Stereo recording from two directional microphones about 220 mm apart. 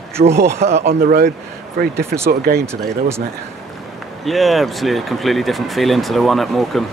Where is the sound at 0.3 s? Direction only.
10° right (ahead or behind).